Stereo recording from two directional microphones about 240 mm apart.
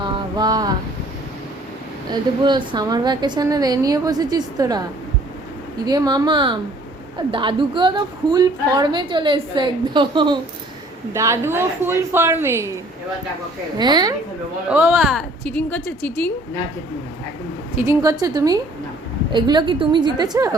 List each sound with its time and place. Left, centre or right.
0.0 s a sound: centre
2.4 s a woman's voice: centre
13.7 s a woman's voice: centre
17.7 s a woman's voice: centre